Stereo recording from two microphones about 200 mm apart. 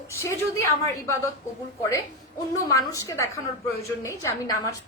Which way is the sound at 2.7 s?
15° left (ahead or behind).